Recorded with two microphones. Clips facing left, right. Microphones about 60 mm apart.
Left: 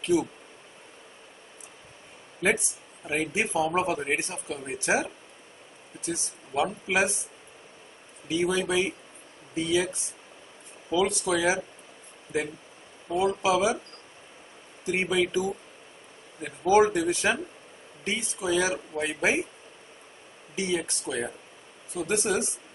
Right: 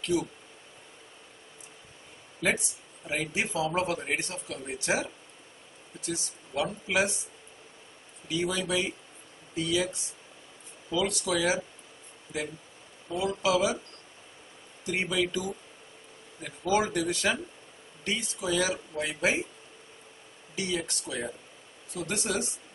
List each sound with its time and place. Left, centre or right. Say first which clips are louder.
0.0 s speech: left 4 dB; centre
2.4 s a man's voice: left 3 dB; left
8.3 s a man's voice: left 4 dB; centre
10.9 s a man's voice: left 4 dB; left
13.1 s a man's voice: left 3 dB; left
14.9 s a man's voice: left 3 dB; left
20.5 s a man's voice: left 3 dB; left
21.9 s a man's voice: left 5 dB; left